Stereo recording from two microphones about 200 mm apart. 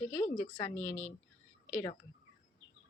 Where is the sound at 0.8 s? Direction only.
5° left (ahead or behind).